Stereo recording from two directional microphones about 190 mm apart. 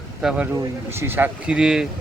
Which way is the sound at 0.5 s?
15° right (ahead or behind).